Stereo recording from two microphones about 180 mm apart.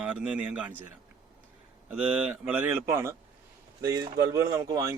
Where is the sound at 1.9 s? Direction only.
10° right (ahead or behind).